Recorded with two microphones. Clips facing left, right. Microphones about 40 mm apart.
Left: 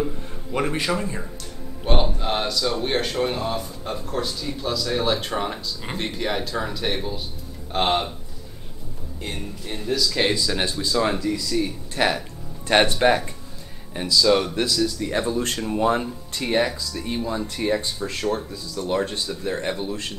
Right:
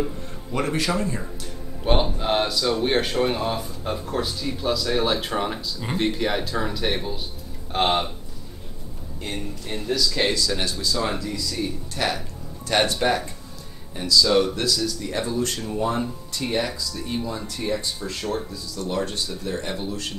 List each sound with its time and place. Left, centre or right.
0.0 s speech: centre
1.9 s speech: centre
9.2 s speech: centre
10.3 s speech: centre
11.9 s speech: left
14.2 s speech: centre
15.0 s speech: left